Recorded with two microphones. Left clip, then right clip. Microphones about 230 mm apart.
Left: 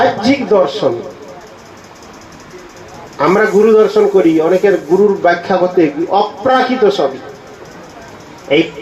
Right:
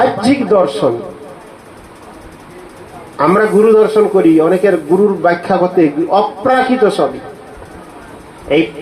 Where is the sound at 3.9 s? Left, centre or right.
Right.